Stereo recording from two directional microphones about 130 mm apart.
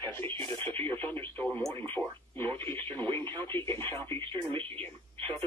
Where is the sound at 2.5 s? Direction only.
15° left (ahead or behind).